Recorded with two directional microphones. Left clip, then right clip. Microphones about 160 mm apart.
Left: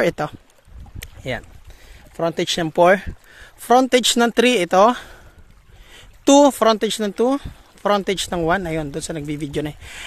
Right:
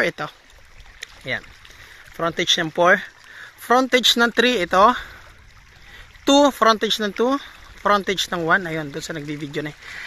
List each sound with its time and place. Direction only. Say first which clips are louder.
0.0 s speech: left 3 dB; 50° left (ahead or behind)
2.1 s speech: right 1 dB; 35° left (ahead or behind)
6.2 s speech: left 2 dB; 35° left (ahead or behind)